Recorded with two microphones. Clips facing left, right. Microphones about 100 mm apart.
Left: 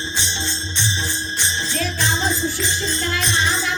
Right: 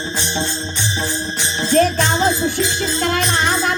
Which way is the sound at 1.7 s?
50° right (ahead or behind).